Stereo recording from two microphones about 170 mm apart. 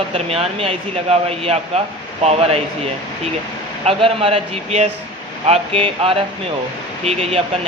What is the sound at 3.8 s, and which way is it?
Speech, 35° right (ahead or behind).